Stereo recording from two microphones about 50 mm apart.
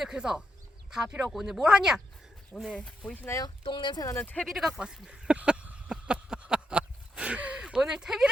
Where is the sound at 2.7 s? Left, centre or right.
Left.